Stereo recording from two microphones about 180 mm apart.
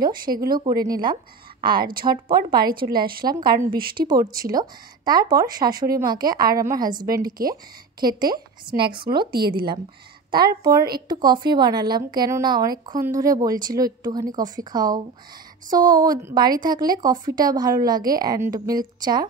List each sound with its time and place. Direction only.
0.2 s a woman's voice: 55° right (ahead or behind)
0.5 s a woman's voice: 20° right (ahead or behind)
2.3 s a woman's voice: 55° right (ahead or behind)
3.3 s a woman's voice: 25° right (ahead or behind)
7.2 s a woman's voice: 55° right (ahead or behind)
8.0 s a woman's voice: 25° right (ahead or behind)